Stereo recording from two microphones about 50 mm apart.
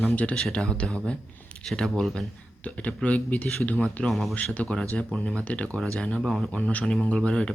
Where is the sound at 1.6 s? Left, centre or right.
Centre.